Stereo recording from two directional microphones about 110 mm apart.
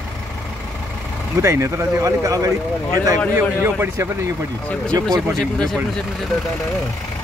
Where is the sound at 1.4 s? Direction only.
25° right (ahead or behind).